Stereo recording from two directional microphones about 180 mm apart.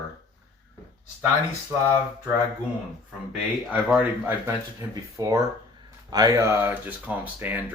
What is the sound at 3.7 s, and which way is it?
Speech, 5° right (ahead or behind).